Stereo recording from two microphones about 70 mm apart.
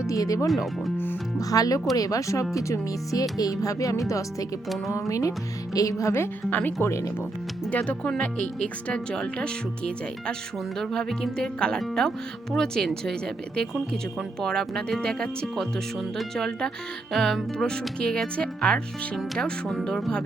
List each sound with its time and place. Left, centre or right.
0.1 s speech: left
0.4 s speech: centre
1.4 s speech: left
6.5 s speech: left; by 20.2 s centre